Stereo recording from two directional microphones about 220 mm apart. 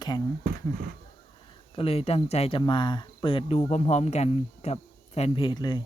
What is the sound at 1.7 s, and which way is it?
Speech, 25° left (ahead or behind).